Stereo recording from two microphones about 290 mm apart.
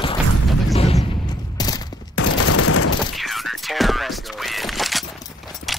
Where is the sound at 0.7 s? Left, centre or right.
Centre.